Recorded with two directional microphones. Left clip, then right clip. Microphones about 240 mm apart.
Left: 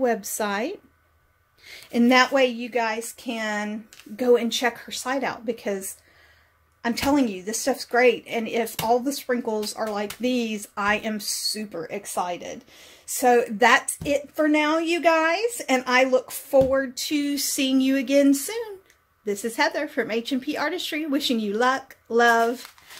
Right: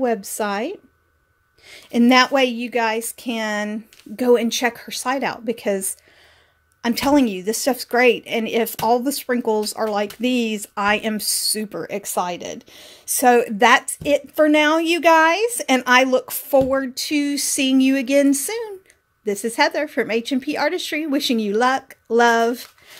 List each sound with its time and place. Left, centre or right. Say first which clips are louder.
0.0 s speech: right 2 dB; centre